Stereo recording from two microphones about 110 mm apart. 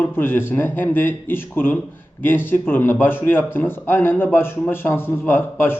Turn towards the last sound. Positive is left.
turn(degrees=20)  # may be behind; listen again after turning